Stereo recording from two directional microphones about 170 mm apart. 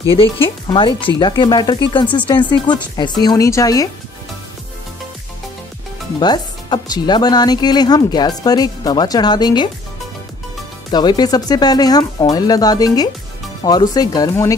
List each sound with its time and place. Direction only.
0.2 s speech: 30° left (ahead or behind)
6.1 s speech: 25° left (ahead or behind)
10.9 s speech: 25° left (ahead or behind)